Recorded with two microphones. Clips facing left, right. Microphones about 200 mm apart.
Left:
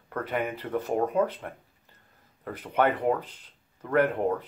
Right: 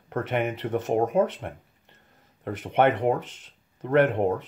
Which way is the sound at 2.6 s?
25° right (ahead or behind).